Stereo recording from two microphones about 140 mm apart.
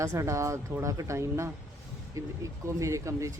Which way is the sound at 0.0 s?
20° right (ahead or behind).